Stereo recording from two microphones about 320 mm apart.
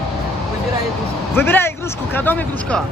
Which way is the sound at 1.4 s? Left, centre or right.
Centre.